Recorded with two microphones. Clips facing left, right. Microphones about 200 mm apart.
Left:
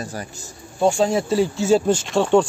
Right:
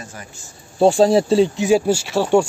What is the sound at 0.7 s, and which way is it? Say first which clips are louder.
Speech: right 5 dB; 35° right (ahead or behind).